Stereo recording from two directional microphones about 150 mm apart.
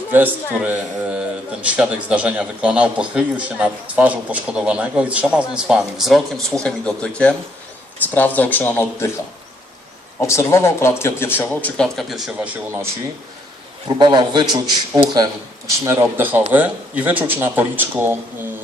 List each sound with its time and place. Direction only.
0.1 s a man's voice: 10° right (ahead or behind); by 9.0 s 15° left (ahead or behind)
10.2 s speech: 20° left (ahead or behind); by 12.3 s centre (ahead or behind)
13.8 s a man's voice: 30° right (ahead or behind); by 18.2 s 15° right (ahead or behind)